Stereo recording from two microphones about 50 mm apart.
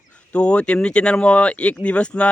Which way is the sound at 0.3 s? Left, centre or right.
Left.